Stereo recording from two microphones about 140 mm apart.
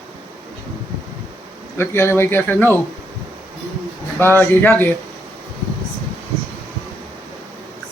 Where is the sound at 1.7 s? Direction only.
15° left (ahead or behind).